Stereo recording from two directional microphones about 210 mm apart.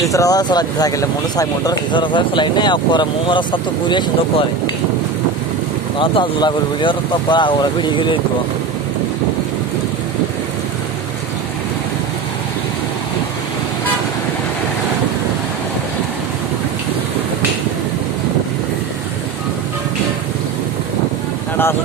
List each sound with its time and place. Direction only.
0.0 s speech: 15° left (ahead or behind)
5.9 s speech: 25° left (ahead or behind)